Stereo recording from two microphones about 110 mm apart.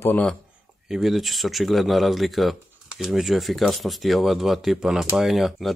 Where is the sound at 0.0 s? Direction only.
15° left (ahead or behind).